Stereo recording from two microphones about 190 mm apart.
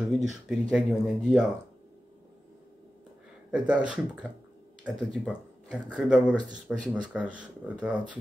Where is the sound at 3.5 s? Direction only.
5° right (ahead or behind).